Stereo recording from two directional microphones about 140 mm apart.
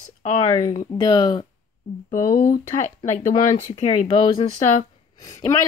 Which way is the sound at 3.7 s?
55° left (ahead or behind).